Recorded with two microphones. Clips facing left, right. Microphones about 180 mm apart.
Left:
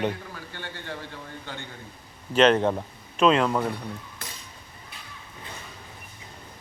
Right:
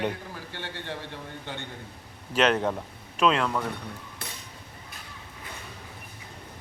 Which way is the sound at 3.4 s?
25° left (ahead or behind).